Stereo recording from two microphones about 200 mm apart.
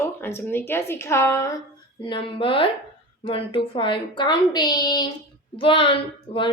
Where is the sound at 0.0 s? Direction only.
10° left (ahead or behind).